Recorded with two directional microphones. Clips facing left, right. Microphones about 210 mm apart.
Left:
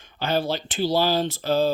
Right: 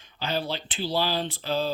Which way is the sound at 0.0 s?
50° left (ahead or behind).